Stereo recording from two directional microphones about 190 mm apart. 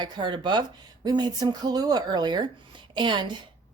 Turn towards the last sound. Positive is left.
turn(degrees=-25)  # may be behind; listen again after turning